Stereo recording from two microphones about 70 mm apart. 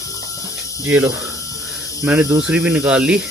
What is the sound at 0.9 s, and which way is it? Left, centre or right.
Speech, right.